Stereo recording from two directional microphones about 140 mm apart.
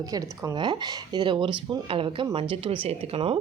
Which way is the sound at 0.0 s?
25° right (ahead or behind).